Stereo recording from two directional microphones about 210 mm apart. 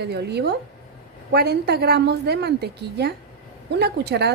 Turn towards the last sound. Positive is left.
turn(degrees=-50)  # may be behind; listen again after turning